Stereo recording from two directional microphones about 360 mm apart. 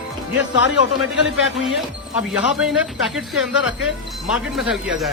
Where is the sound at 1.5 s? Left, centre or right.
Centre.